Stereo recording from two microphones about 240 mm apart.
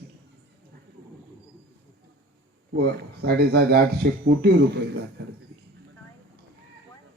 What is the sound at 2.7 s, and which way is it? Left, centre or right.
Speech, right.